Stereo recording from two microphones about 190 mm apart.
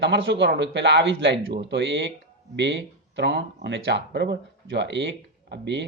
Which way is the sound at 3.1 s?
65° right (ahead or behind).